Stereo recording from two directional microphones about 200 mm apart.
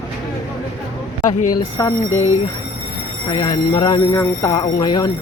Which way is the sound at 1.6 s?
15° left (ahead or behind).